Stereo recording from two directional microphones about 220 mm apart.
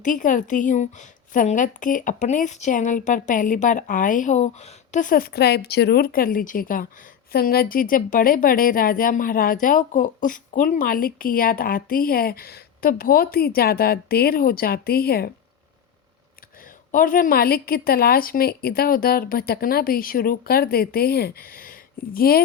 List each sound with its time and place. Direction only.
0.0 s a woman's voice: 35° left (ahead or behind)
16.9 s a woman's voice: 40° left (ahead or behind)